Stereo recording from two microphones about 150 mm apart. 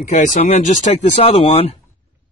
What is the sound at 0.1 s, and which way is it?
Speech, 55° left (ahead or behind).